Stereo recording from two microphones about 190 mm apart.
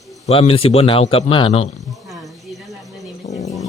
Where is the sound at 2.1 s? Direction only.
Centre (ahead or behind).